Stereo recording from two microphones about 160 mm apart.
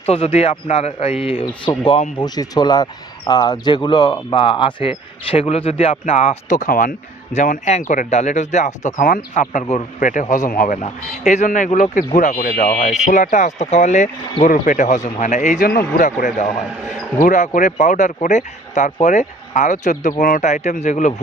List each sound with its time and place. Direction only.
0.0 s speech: 40° left (ahead or behind); by 12.7 s 55° left (ahead or behind)
12.8 s speech: 45° left (ahead or behind)